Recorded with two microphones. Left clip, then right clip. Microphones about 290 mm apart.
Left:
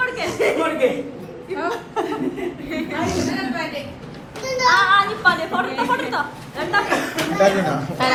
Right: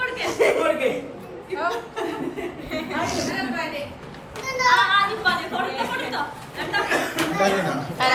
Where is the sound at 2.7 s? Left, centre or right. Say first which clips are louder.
Left 2 dB; centre.